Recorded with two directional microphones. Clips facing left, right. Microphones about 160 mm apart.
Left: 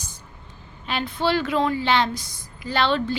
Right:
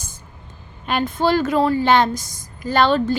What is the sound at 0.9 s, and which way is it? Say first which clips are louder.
A woman's voice: right 5 dB; 45° right (ahead or behind).